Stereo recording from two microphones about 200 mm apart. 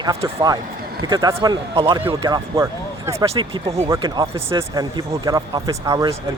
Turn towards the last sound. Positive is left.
turn(degrees=-15)  # may be behind; listen again after turning